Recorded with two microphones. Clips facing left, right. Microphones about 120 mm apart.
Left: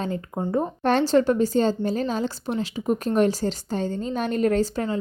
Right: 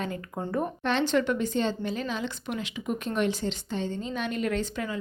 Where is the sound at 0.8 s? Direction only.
40° left (ahead or behind).